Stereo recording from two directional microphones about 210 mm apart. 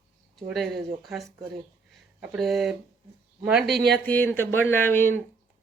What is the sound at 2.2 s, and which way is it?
Speech, centre (ahead or behind).